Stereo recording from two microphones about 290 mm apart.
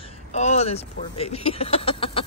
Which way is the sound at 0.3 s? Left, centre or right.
Left.